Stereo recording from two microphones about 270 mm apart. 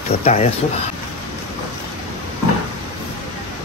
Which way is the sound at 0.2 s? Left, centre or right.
Left.